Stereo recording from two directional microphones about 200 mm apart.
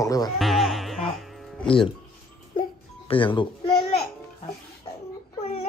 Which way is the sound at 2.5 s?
25° left (ahead or behind).